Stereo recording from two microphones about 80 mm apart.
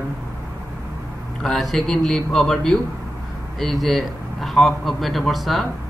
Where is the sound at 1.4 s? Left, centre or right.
Centre.